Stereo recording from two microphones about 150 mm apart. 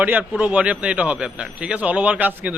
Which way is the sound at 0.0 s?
10° right (ahead or behind).